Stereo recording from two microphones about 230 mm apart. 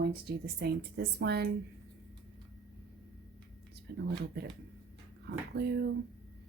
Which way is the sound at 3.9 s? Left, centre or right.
Right.